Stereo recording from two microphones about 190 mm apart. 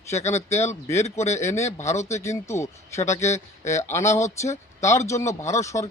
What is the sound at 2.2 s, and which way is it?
A man's voice, 15° left (ahead or behind).